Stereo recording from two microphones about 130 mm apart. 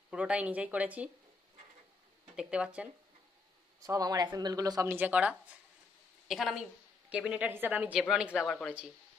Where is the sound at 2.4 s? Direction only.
10° right (ahead or behind).